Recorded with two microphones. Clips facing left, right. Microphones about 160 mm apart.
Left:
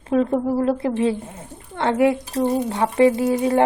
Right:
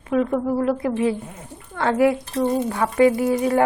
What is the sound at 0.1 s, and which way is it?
A woman's voice, 30° left (ahead or behind).